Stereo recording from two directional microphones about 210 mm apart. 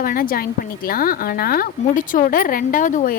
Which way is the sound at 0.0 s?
40° left (ahead or behind).